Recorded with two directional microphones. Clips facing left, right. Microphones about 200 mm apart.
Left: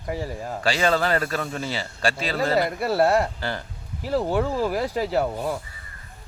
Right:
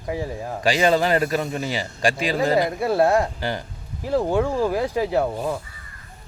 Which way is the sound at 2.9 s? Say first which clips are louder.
Right 1 dB; 5° left (ahead or behind).